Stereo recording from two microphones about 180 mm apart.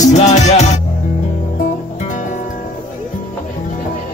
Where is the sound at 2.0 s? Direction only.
45° left (ahead or behind).